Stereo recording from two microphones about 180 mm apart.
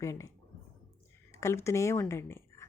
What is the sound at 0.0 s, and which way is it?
Speech, 15° left (ahead or behind).